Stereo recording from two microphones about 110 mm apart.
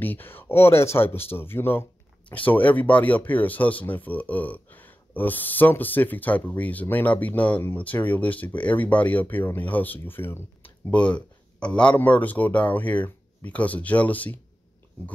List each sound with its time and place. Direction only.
0.0 s speech: 15° left (ahead or behind)